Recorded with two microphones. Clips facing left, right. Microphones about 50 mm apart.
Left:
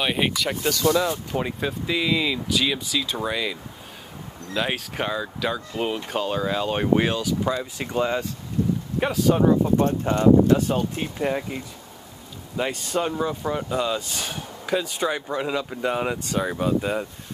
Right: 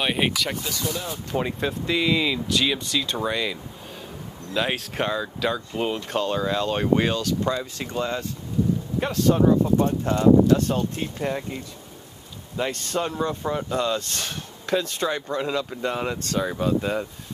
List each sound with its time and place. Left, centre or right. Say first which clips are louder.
0.0 s speech: even; centre
0.7 s speech: left 9 dB; left
1.3 s speech: right 1 dB; centre
4.6 s speech: right 1 dB; centre; by 10.2 s left
10.5 s speech: even; centre